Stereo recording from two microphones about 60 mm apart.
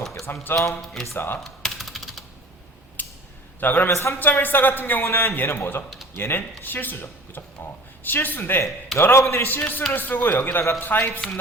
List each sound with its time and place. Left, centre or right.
0.5 s a man's voice: left
1.1 s speech: left
1.5 s typing: centre
3.0 s a sound: left
3.6 s speech: left
3.9 s a man's voice: left
4.2 s a man's voice: left
9.0 s a man's voice: left
9.4 s speech: left